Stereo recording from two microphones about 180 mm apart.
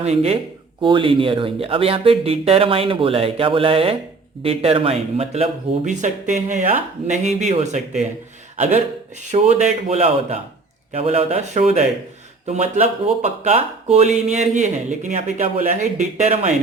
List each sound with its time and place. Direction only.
0.0 s speech: 35° right (ahead or behind)